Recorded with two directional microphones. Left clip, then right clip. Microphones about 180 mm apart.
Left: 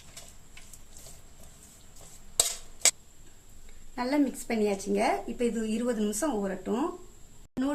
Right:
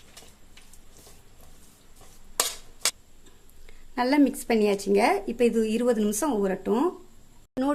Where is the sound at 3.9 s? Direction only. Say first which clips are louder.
Right 6 dB; 65° right (ahead or behind).